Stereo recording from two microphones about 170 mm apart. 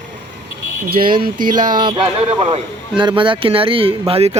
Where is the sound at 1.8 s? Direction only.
25° right (ahead or behind).